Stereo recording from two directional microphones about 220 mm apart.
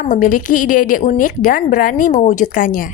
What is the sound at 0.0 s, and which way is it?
A woman's voice, 40° left (ahead or behind).